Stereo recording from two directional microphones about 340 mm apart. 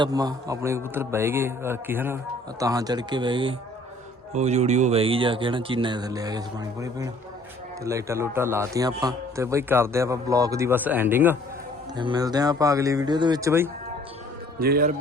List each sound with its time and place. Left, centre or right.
0.0 s a man's voice: centre
14.6 s a man's voice: right